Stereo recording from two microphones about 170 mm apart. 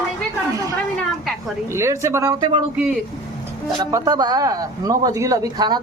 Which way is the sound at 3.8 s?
20° right (ahead or behind).